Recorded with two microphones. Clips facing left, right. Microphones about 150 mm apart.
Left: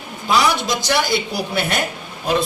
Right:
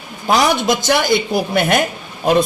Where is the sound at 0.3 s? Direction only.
50° right (ahead or behind).